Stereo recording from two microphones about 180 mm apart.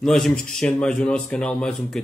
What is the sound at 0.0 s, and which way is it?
Speech, 5° left (ahead or behind).